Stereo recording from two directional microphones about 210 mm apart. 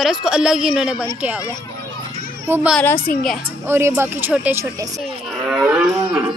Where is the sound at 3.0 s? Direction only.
45° left (ahead or behind).